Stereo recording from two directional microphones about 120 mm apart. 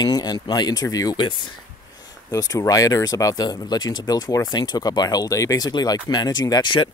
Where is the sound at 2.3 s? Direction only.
30° left (ahead or behind).